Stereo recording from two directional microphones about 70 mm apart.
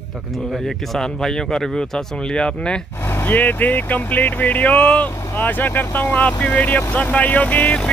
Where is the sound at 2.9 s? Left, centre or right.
Left.